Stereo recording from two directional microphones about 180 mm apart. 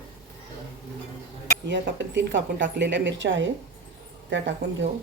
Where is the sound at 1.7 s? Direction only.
85° right.